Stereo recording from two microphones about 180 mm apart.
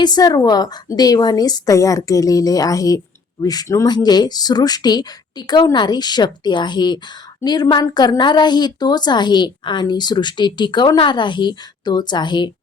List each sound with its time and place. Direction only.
0.0 s a woman's voice: 20° left (ahead or behind)